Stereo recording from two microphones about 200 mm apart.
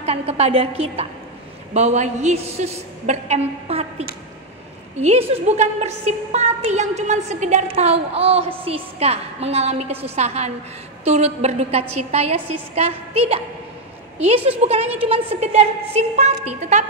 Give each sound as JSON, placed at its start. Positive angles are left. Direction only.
{"t": 0.0, "sound": "a woman's voice", "side_deg": -30}
{"t": 4.9, "sound": "a woman's voice", "side_deg": -35}